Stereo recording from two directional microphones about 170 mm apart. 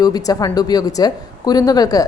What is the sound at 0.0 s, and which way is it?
A woman's voice, 20° left (ahead or behind).